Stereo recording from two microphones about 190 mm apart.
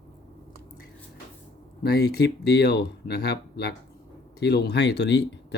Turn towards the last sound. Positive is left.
turn(degrees=65)  # may be behind; listen again after turning